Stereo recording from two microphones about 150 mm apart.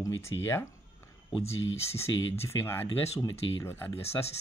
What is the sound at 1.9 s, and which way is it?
Speech, 15° left (ahead or behind).